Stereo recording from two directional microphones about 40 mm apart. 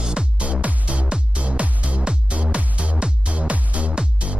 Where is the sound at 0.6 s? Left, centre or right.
Right.